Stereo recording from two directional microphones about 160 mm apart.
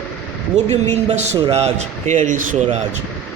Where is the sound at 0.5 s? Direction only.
45° right (ahead or behind).